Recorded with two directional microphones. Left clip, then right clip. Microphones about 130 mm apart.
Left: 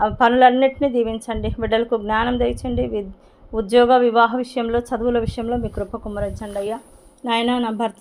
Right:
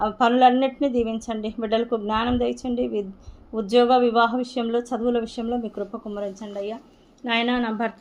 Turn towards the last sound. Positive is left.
turn(degrees=40)  # may be behind; listen again after turning